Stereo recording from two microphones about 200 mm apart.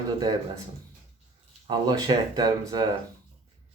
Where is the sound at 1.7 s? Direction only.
20° right (ahead or behind).